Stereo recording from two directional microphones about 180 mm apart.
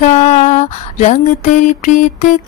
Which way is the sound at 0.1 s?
40° left (ahead or behind).